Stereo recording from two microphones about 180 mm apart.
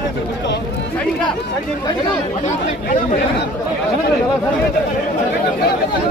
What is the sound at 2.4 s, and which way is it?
Speech, 45° left (ahead or behind).